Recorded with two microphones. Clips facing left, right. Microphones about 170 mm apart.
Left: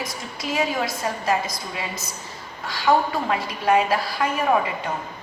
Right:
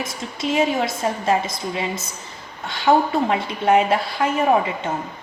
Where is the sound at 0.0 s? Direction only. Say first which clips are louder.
Right 4 dB; 25° right (ahead or behind).